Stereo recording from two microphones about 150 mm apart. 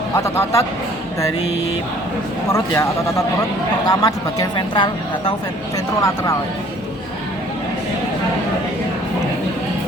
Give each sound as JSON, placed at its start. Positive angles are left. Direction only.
{"t": 0.2, "sound": "speech", "side_deg": 20}
{"t": 2.5, "sound": "speech", "side_deg": 20}